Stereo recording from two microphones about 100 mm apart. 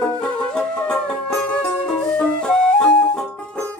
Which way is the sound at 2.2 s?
10° left (ahead or behind).